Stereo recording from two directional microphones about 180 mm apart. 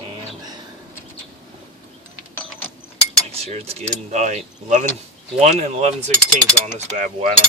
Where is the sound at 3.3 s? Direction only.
35° right (ahead or behind).